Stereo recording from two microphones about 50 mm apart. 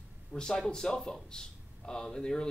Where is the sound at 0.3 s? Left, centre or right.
Centre.